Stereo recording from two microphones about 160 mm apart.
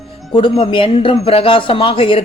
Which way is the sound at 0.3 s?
35° left (ahead or behind).